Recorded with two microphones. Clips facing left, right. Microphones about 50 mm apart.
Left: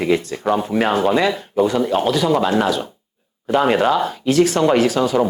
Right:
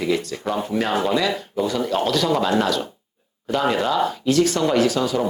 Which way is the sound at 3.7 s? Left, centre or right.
Left.